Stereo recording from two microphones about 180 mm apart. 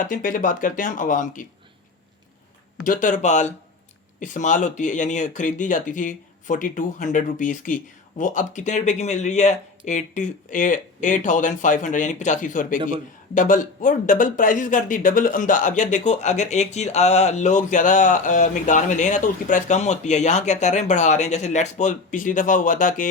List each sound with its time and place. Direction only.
0.1 s speech: 50° left (ahead or behind)
2.8 s speech: 45° left (ahead or behind)